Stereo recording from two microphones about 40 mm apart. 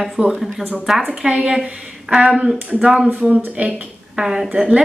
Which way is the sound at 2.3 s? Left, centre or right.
Centre.